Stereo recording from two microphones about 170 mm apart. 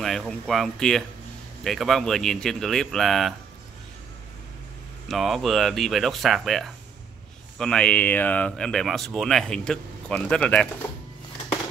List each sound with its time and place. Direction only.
0.0 s speech: centre (ahead or behind)
5.0 s speech: centre (ahead or behind)